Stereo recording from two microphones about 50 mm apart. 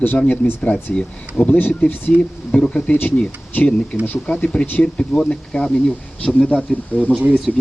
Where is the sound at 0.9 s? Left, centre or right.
Left.